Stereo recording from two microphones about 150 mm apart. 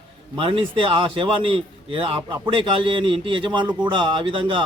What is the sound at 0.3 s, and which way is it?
A man's voice, 35° right (ahead or behind).